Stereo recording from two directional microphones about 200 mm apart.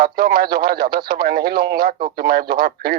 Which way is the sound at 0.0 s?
45° right (ahead or behind).